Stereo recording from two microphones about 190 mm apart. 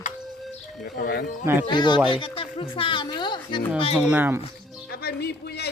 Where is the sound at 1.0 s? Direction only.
50° left (ahead or behind).